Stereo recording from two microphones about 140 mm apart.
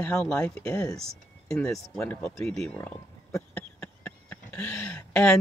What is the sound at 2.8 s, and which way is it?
Speech, 20° left (ahead or behind).